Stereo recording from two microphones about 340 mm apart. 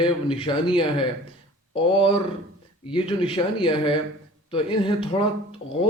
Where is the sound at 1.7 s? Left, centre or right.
Centre.